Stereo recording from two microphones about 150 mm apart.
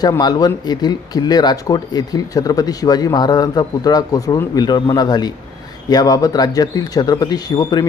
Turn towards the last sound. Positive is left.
turn(degrees=25)  # may be behind; listen again after turning